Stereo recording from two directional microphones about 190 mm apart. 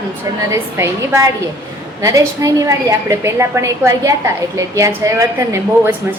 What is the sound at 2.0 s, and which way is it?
A woman's voice, 15° right (ahead or behind).